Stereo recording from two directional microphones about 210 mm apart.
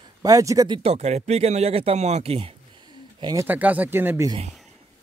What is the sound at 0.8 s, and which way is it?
Speech, 30° right (ahead or behind).